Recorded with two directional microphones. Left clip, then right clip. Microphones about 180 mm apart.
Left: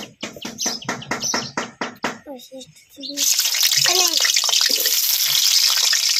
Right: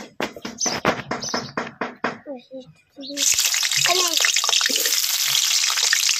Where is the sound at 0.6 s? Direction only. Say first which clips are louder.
Right 4 dB; 30° right (ahead or behind).